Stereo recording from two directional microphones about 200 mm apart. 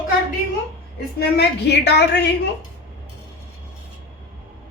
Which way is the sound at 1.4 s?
55° left (ahead or behind).